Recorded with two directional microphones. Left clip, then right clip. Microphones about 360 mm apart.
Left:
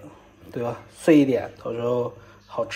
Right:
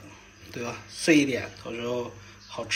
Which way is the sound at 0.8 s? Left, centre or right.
Left.